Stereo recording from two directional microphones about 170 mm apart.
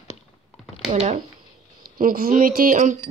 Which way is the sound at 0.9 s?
40° right (ahead or behind).